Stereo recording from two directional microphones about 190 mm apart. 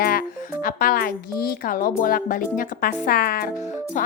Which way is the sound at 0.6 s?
45° left (ahead or behind).